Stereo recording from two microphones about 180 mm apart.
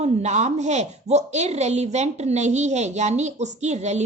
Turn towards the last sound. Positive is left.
turn(degrees=-40)  # may be behind; listen again after turning